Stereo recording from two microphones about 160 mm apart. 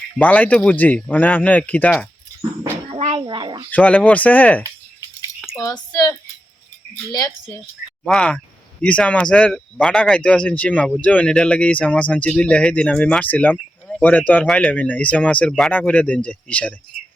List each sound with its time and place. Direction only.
0.2 s speech: 10° left (ahead or behind)
2.9 s speech: 35° right (ahead or behind)
3.7 s speech: 10° left (ahead or behind)
5.5 s speech: 20° left (ahead or behind)
8.0 s speech: 5° left (ahead or behind)